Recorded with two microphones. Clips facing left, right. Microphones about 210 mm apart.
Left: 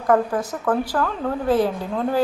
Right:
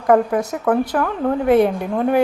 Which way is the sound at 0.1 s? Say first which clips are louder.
Right 4 dB; 20° right (ahead or behind).